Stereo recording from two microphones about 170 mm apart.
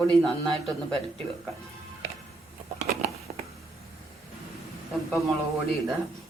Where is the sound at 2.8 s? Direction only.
65° right (ahead or behind).